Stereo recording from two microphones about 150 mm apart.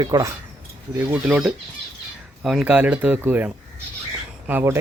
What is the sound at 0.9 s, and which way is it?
Speech, 10° right (ahead or behind).